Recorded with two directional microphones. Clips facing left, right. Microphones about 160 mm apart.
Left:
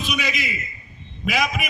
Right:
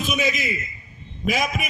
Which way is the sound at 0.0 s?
45° right (ahead or behind).